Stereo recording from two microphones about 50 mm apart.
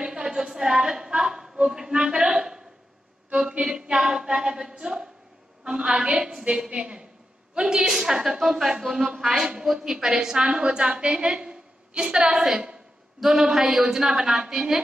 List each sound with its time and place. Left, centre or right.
0.0 s a sound: centre
3.5 s singing: centre
5.6 s a woman's voice: centre
6.4 s a woman's voice: right